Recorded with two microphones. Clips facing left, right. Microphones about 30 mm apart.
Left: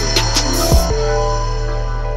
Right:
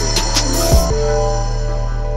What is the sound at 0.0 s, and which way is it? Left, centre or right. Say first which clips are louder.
Music: left 1 dB; centre.